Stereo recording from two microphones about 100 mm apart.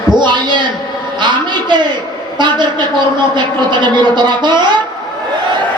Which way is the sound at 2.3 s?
50° right (ahead or behind).